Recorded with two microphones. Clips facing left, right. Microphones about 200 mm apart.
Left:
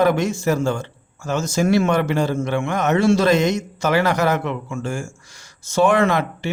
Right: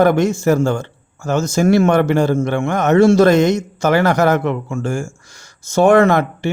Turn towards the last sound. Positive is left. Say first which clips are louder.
# right 6 dB
turn(degrees=-50)  # may be behind; listen again after turning